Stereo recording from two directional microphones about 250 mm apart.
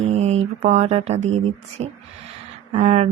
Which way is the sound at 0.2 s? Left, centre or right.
Right.